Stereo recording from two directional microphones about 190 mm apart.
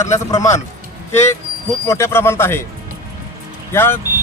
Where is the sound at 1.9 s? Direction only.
15° left (ahead or behind).